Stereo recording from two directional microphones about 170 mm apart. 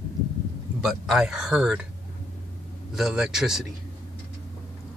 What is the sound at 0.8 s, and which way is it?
Speech, centre (ahead or behind).